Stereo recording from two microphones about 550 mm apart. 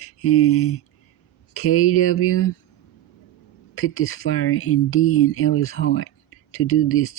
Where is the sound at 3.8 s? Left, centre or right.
Left.